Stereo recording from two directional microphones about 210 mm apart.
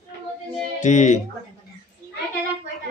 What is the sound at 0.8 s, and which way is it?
Speech, 35° left (ahead or behind).